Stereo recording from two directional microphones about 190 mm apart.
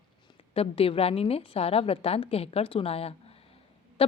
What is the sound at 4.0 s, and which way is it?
Owl, 30° left (ahead or behind).